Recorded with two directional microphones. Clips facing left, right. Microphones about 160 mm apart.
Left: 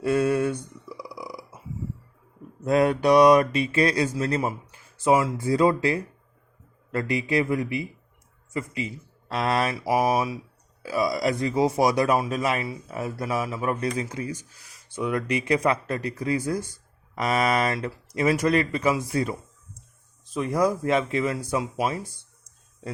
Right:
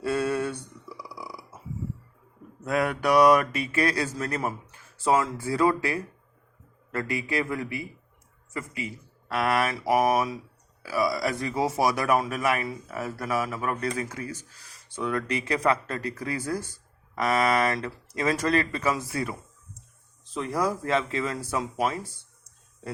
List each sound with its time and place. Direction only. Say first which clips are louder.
0.0 s speech: left 4 dB; 15° left (ahead or behind)
1.0 s burping: left 3 dB; 15° left (ahead or behind)
2.6 s speech: left 5 dB; 25° left (ahead or behind)
9.7 s speech: even; 10° left (ahead or behind)
10.8 s speech: left 2 dB; 20° left (ahead or behind)